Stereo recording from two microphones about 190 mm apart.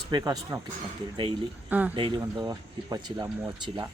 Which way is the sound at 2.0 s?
25° right (ahead or behind).